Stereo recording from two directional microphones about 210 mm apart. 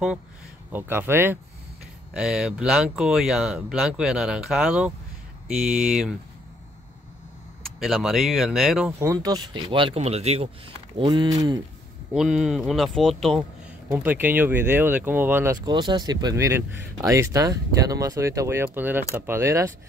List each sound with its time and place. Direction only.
0.7 s speech: 10° right (ahead or behind)
7.8 s speech: centre (ahead or behind); by 11.3 s 20° right (ahead or behind)
12.1 s speech: 5° right (ahead or behind)
13.4 s speech: 10° right (ahead or behind)